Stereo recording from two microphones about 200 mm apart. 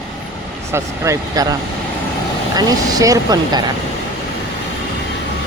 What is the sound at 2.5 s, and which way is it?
Speech, 20° right (ahead or behind).